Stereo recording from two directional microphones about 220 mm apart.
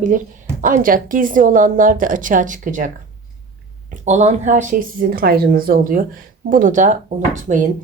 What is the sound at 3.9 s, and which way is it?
A woman's voice, 35° right (ahead or behind).